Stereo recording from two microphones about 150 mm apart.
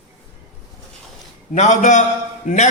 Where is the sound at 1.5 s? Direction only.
55° left (ahead or behind).